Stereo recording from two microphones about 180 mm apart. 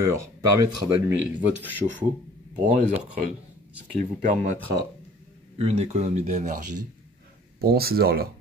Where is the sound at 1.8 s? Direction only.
35° right (ahead or behind).